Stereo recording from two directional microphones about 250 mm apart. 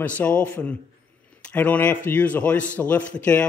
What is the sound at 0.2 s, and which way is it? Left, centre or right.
Speech, centre.